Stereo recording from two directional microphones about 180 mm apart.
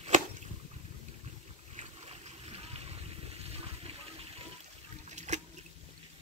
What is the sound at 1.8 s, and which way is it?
Boat, 35° right (ahead or behind).